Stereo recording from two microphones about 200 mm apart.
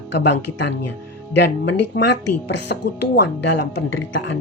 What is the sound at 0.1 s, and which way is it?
Speech, 60° left (ahead or behind).